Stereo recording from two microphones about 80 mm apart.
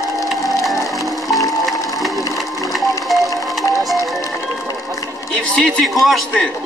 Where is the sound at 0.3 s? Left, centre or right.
Centre.